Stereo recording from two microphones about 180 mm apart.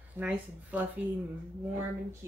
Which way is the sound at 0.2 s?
10° right (ahead or behind).